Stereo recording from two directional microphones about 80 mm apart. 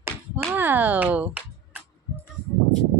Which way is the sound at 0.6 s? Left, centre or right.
Right.